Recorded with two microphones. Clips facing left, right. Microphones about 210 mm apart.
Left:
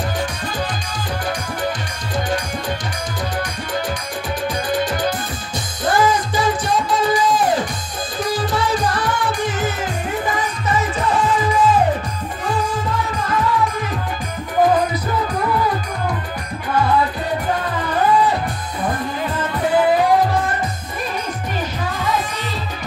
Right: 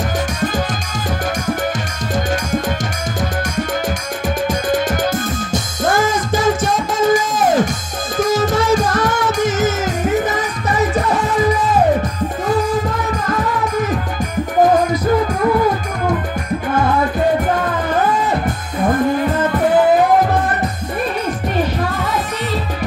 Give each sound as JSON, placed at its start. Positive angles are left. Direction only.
{"t": 4.6, "sound": "music", "side_deg": -45}